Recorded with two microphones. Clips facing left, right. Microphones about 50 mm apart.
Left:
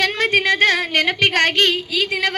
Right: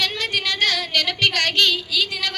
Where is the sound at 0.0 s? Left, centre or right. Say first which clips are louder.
Left 6 dB; left.